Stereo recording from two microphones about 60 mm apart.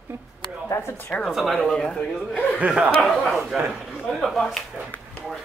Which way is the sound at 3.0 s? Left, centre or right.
Centre.